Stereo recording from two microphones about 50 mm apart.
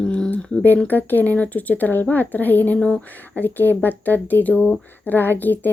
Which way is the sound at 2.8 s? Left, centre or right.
Centre.